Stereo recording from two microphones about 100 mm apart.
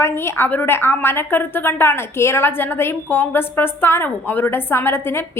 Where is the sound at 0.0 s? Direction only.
25° left (ahead or behind).